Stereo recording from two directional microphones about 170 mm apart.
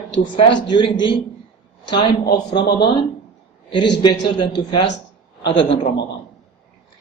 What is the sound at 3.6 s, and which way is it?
A man's voice, 25° left (ahead or behind).